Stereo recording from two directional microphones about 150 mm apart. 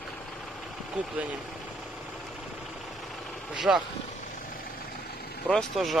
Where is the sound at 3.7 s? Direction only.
10° right (ahead or behind).